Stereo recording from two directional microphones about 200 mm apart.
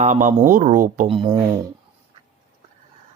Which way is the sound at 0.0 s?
40° right (ahead or behind).